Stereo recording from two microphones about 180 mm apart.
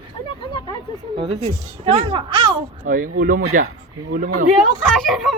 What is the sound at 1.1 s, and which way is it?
Speech, 30° right (ahead or behind).